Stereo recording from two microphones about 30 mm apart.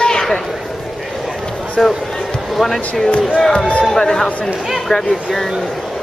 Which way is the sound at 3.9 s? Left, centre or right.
Left.